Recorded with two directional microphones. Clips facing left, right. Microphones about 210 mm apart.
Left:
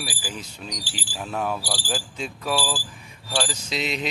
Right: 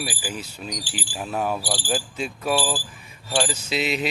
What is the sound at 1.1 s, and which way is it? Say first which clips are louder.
Speech: right 2 dB; 5° right (ahead or behind).